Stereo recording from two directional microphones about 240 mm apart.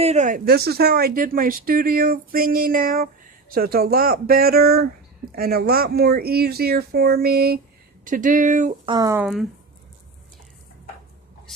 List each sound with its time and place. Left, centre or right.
0.0 s speech: right
8.9 s speech: centre